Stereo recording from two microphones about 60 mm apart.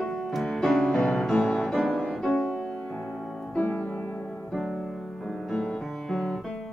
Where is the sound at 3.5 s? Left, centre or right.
Left.